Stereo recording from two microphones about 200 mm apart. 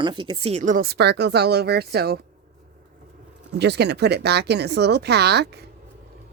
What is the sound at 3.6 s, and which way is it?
A woman's voice, 55° right (ahead or behind).